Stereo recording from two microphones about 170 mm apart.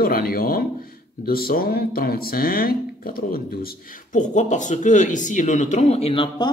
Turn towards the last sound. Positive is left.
turn(degrees=30)  # may be behind; listen again after turning